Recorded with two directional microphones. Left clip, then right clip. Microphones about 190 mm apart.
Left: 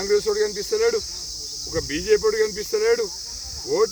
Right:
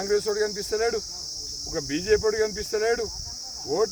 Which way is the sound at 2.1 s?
15° right (ahead or behind).